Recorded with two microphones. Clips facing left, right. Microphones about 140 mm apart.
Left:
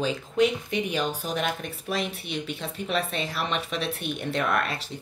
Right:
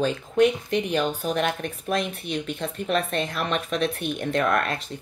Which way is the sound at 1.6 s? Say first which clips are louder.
Right 3 dB; 55° right (ahead or behind).